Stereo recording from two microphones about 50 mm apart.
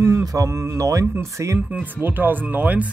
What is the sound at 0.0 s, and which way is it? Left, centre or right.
Mantra, right.